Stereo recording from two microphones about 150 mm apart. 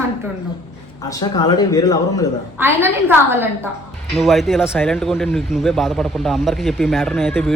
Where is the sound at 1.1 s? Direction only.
25° left (ahead or behind).